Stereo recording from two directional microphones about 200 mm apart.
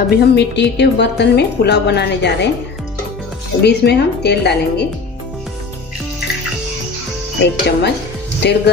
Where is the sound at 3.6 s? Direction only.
55° left (ahead or behind).